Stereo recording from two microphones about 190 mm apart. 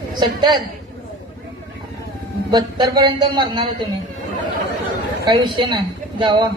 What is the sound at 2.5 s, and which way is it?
Speech, 25° right (ahead or behind).